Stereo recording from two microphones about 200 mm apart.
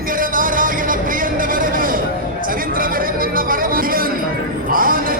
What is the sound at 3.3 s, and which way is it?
Music, 45° right (ahead or behind).